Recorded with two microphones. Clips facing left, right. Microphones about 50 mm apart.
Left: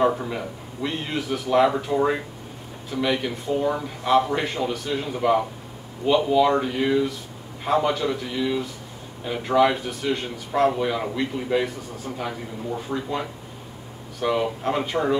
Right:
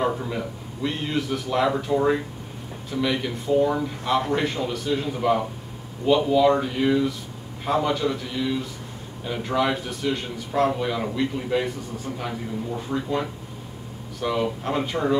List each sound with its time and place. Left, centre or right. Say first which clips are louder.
0.0 s a man's voice: left 3 dB; centre
14.2 s a man's voice: left 2 dB; centre